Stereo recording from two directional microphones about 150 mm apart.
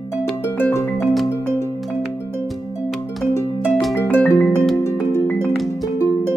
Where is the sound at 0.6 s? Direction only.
15° left (ahead or behind).